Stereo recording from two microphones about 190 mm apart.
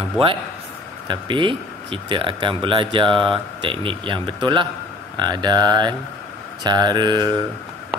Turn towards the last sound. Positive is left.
turn(degrees=-20)  # may be behind; listen again after turning